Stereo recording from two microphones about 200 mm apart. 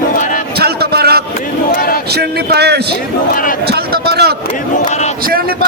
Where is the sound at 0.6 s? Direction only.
50° right (ahead or behind).